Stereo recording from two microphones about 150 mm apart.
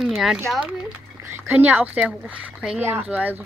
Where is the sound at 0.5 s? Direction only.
5° right (ahead or behind).